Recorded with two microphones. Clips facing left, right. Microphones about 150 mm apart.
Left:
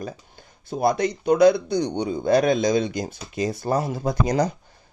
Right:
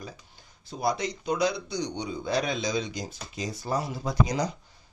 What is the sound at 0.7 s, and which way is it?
Speech, 55° left (ahead or behind).